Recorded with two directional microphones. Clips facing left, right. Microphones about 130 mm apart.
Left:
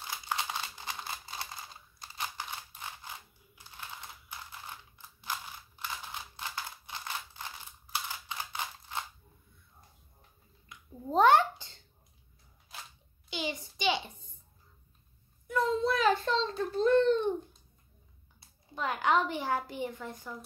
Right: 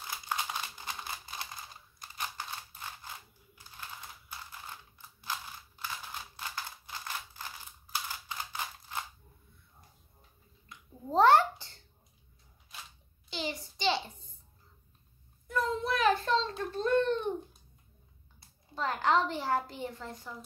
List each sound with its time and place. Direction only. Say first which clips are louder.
0.4 s computer keyboard: even; 20° left (ahead or behind)
2.1 s scissors: left 1 dB; 20° left (ahead or behind)
4.6 s typing: left 1 dB; 20° left (ahead or behind)
5.8 s mechanisms: left 1 dB; 20° left (ahead or behind)
8.3 s typewriter: left 1 dB; 20° left (ahead or behind)
11.1 s babbling: even; 20° left (ahead or behind)
13.3 s a sound: left 1 dB; 15° left (ahead or behind)
15.4 s a sound: left 3 dB; 20° left (ahead or behind)
18.8 s a sound: even; 15° left (ahead or behind)